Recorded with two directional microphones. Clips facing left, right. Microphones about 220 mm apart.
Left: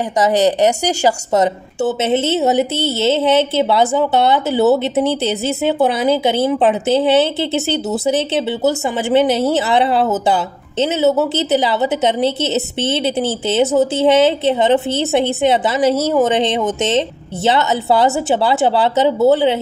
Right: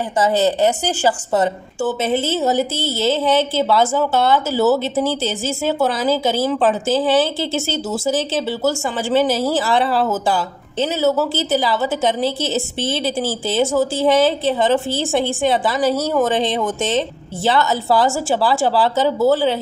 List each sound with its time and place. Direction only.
0.2 s a woman's voice: 15° left (ahead or behind)